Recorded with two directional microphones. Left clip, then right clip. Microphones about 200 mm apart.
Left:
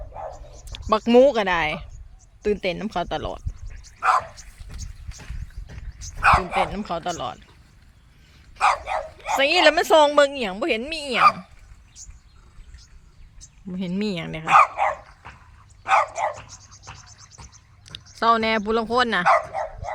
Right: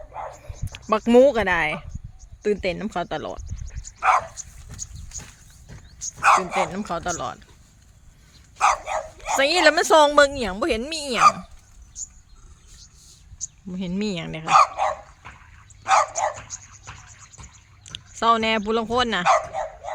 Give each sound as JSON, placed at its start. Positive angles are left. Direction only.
{"t": 0.1, "sound": "bow-wow", "side_deg": -40}
{"t": 0.9, "sound": "a woman's voice", "side_deg": 0}
{"t": 3.4, "sound": "dog", "side_deg": -40}
{"t": 6.1, "sound": "bow-wow", "side_deg": -60}
{"t": 6.7, "sound": "a woman's voice", "side_deg": -5}
{"t": 8.5, "sound": "dog", "side_deg": -60}
{"t": 9.4, "sound": "a woman's voice", "side_deg": 0}
{"t": 13.7, "sound": "a woman's voice", "side_deg": 0}
{"t": 14.4, "sound": "speech", "side_deg": -80}
{"t": 14.7, "sound": "dog", "side_deg": -55}
{"t": 18.2, "sound": "a woman's voice", "side_deg": 0}
{"t": 19.2, "sound": "dog", "side_deg": -55}